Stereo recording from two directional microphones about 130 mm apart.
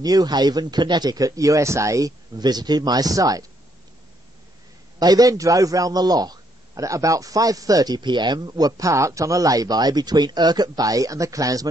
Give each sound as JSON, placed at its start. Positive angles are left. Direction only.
{"t": 0.0, "sound": "a man's voice", "side_deg": -30}
{"t": 4.9, "sound": "a man's voice", "side_deg": -30}